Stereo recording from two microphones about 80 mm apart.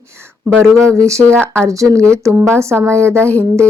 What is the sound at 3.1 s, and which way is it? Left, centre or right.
Speech, centre.